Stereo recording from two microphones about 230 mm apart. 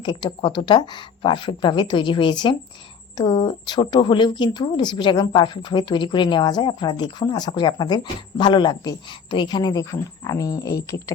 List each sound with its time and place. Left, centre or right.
0.0 s speech: centre